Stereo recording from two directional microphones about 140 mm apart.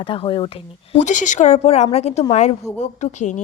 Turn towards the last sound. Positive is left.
turn(degrees=60)  # may be behind; listen again after turning